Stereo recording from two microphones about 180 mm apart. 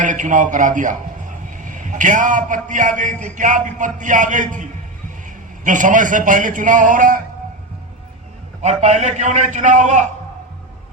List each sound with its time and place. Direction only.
0.0 s a man's voice: 45° right (ahead or behind)
8.6 s a man's voice: 40° right (ahead or behind)